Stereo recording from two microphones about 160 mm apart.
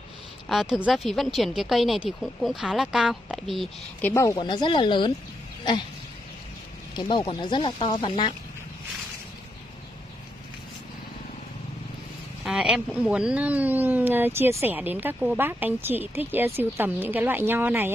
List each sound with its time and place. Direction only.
0.5 s speech: 5° right (ahead or behind)
4.0 s speech: 20° left (ahead or behind)
7.0 s speech: 30° left (ahead or behind)
12.4 s speech: 5° right (ahead or behind)